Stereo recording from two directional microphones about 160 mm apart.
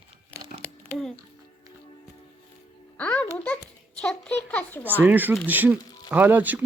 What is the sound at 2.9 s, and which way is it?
Music, 10° left (ahead or behind).